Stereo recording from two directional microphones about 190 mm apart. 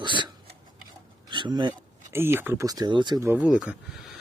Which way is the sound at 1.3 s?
25° right (ahead or behind).